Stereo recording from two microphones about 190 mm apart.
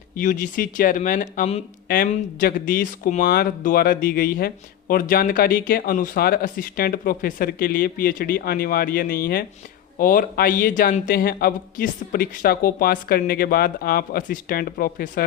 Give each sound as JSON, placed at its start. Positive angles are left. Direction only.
{"t": 0.2, "sound": "speech", "side_deg": 45}
{"t": 1.9, "sound": "speech", "side_deg": 50}